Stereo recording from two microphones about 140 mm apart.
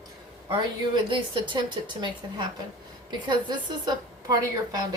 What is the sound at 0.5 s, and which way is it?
A woman's voice, 35° right (ahead or behind).